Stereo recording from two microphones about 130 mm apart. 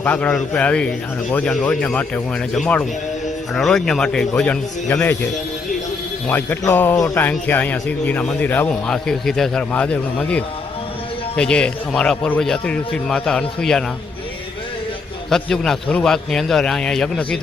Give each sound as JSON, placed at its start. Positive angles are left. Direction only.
{"t": 0.0, "sound": "a man's voice", "side_deg": 10}
{"t": 6.2, "sound": "a man's voice", "side_deg": 15}
{"t": 7.3, "sound": "a man's voice", "side_deg": 15}
{"t": 15.3, "sound": "a man's voice", "side_deg": 5}